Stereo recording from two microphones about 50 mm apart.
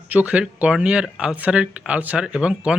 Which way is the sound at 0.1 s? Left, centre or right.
Right.